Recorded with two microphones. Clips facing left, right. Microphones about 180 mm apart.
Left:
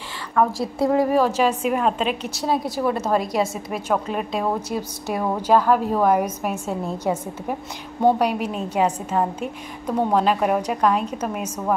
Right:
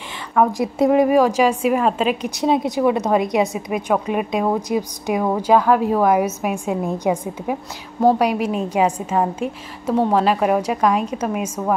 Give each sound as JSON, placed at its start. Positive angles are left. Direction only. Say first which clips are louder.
{"t": 0.4, "sound": "a woman's voice", "louder": "right 3 dB", "side_deg": -20}
{"t": 2.3, "sound": "a woman's voice", "louder": "right 6 dB", "side_deg": -20}